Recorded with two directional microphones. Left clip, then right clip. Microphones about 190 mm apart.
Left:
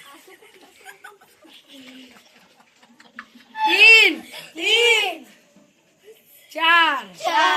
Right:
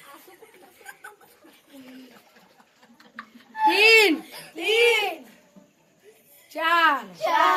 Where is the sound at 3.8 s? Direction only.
55° right (ahead or behind).